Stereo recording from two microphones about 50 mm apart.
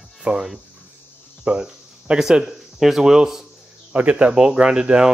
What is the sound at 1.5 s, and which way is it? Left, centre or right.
Cricket, right.